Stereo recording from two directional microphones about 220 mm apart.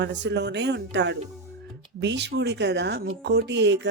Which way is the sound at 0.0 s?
50° right (ahead or behind).